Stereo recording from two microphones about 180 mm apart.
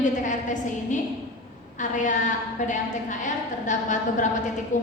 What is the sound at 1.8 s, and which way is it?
A woman's voice, 45° left (ahead or behind).